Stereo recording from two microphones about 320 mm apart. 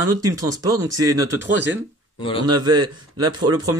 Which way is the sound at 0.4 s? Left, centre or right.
Centre.